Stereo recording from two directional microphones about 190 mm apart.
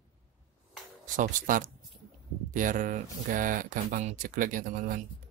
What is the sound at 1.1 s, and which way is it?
A man's voice, 45° right (ahead or behind).